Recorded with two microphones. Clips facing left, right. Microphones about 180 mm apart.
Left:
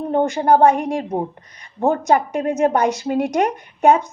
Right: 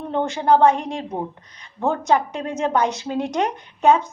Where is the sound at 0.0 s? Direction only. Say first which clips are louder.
Left 5 dB; 40° left (ahead or behind).